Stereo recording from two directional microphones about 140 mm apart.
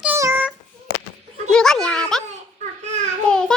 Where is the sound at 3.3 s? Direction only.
5° left (ahead or behind).